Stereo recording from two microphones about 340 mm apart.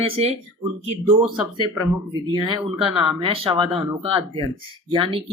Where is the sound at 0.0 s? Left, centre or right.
Centre.